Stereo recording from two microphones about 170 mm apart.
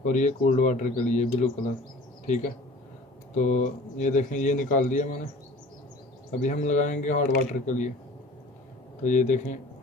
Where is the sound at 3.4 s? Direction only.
45° left (ahead or behind).